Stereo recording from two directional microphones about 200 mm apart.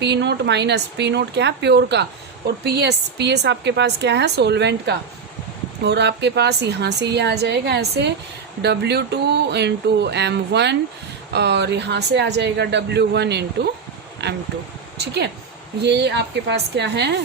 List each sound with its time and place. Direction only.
0.0 s speech: 60° right (ahead or behind)